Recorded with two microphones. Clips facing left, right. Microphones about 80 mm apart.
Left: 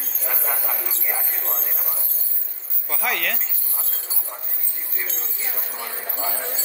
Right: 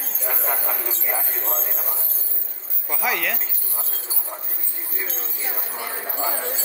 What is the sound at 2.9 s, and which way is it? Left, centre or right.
Speech, centre.